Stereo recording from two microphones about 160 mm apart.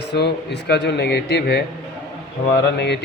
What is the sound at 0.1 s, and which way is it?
Speech, 90° left.